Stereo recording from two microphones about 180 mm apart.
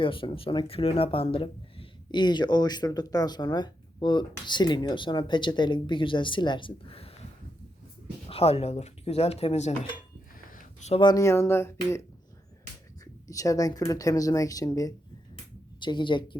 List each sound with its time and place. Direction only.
0.0 s speech: 30° left (ahead or behind)
8.3 s speech: 35° left (ahead or behind)
10.5 s a sound: 45° left (ahead or behind)
11.0 s speech: 20° left (ahead or behind)
13.2 s speech: 20° left (ahead or behind)
15.8 s speech: 25° left (ahead or behind)